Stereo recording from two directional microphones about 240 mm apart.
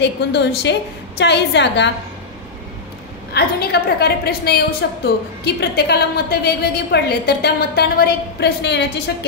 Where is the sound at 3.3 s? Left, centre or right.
Left.